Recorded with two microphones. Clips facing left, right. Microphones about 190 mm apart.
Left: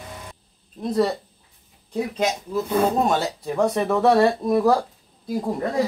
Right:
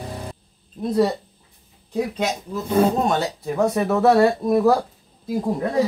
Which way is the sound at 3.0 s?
Centre (ahead or behind).